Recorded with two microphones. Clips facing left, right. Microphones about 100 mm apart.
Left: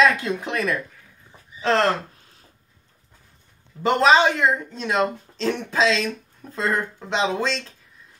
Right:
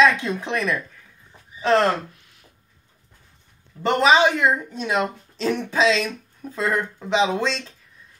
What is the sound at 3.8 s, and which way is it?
Speech, centre (ahead or behind).